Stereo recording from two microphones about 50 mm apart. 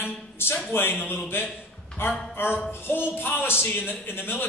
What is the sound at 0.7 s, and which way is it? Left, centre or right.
Speech, left.